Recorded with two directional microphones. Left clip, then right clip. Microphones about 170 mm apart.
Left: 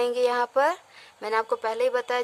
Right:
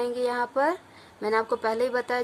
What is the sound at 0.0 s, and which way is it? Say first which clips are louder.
A woman's voice: left 3 dB; 50° left (ahead or behind).